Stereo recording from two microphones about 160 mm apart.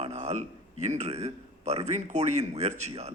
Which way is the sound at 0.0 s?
45° right (ahead or behind).